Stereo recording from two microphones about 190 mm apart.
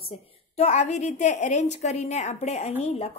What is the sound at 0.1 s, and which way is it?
Speech, 35° left (ahead or behind).